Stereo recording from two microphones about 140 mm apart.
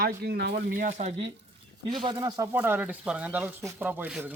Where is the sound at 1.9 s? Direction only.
35° right (ahead or behind).